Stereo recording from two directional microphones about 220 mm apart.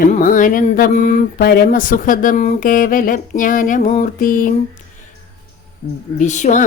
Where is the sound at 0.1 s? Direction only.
40° left (ahead or behind).